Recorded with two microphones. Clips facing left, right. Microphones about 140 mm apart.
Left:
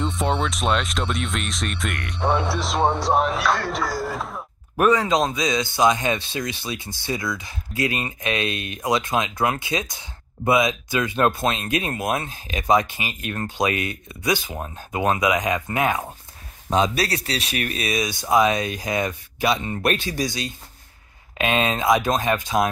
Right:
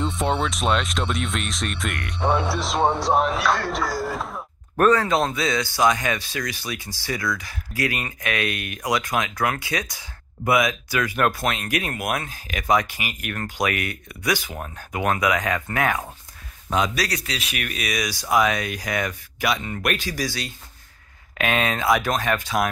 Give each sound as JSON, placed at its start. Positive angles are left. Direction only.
{"t": 0.0, "sound": "speech", "side_deg": 0}
{"t": 4.8, "sound": "speech", "side_deg": 15}